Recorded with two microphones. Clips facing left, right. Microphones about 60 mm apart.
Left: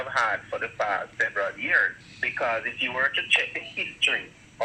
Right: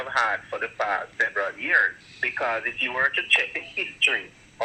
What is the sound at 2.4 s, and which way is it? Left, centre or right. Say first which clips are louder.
Speech: even; right.